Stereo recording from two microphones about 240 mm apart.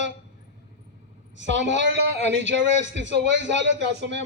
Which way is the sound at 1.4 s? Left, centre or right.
Right.